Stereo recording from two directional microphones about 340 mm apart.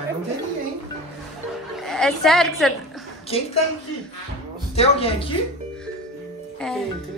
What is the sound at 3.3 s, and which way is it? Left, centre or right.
Speech, centre.